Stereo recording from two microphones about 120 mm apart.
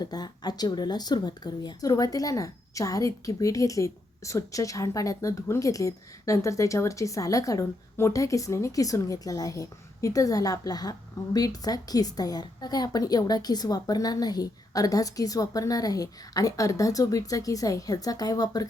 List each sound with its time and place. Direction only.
0.0 s a woman's voice: 35° left (ahead or behind)